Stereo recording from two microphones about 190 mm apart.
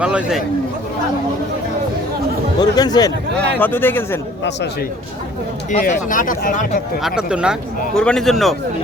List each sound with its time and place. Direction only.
0.0 s a man's voice: 5° right (ahead or behind)
2.6 s speech: 20° left (ahead or behind)
5.7 s speech: 40° left (ahead or behind)
7.0 s a man's voice: 5° right (ahead or behind)